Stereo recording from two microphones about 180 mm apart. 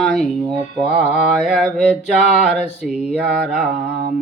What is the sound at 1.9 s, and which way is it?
Mantra, 40° left (ahead or behind).